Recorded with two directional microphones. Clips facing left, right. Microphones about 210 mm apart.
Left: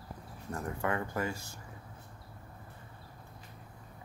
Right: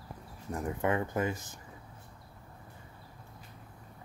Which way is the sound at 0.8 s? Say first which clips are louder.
Right 4 dB; 20° right (ahead or behind).